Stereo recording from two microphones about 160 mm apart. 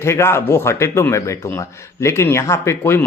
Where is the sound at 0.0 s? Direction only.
15° left (ahead or behind).